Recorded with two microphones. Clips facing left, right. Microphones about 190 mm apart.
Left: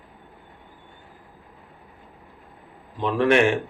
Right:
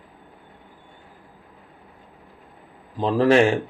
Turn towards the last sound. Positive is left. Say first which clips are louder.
# right 2 dB
turn(degrees=-30)  # may be behind; listen again after turning